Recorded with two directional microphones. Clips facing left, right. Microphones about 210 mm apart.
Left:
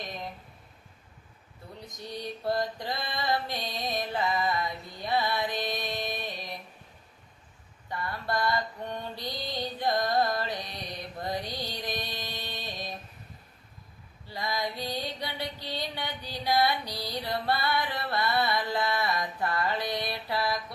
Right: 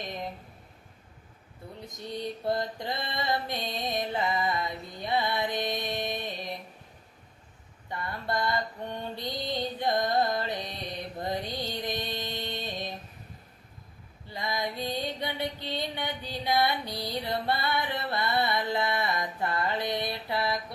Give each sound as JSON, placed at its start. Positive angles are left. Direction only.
{"t": 2.0, "sound": "mantra", "side_deg": -20}
{"t": 7.9, "sound": "female singing", "side_deg": -20}
{"t": 11.2, "sound": "mantra", "side_deg": -20}
{"t": 11.7, "sound": "music", "side_deg": -20}
{"t": 14.3, "sound": "music", "side_deg": -20}